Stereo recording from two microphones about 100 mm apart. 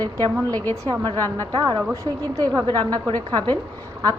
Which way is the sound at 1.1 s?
20° left (ahead or behind).